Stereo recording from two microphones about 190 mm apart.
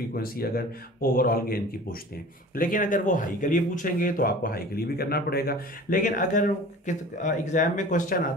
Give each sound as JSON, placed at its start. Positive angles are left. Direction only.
{"t": 0.1, "sound": "a man's voice", "side_deg": 50}